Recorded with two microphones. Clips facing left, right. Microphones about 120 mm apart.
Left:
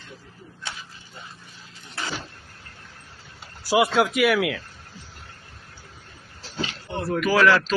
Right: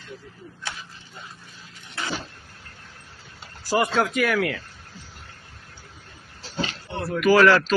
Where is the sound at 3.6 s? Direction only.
5° left (ahead or behind).